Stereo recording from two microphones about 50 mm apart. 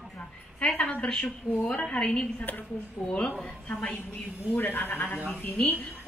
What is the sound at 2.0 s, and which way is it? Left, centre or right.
Speech, centre.